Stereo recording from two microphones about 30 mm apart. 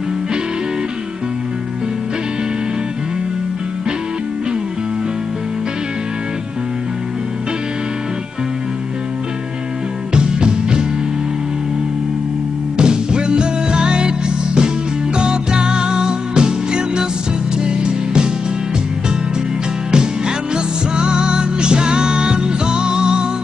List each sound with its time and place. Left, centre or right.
10.1 s music: right
12.7 s music: right
19.9 s music: right